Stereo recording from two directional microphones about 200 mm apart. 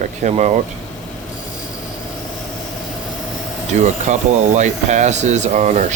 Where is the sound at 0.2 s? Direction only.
35° right (ahead or behind).